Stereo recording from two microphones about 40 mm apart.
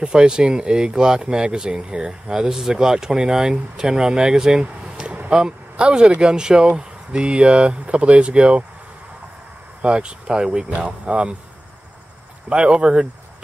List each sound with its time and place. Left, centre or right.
0.0 s speech: centre
9.8 s speech: right
12.4 s speech: right